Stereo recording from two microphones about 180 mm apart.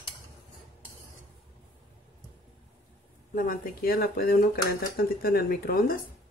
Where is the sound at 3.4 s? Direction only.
50° left (ahead or behind).